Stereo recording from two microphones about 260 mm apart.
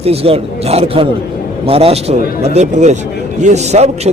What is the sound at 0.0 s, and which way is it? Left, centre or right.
A man's voice, right.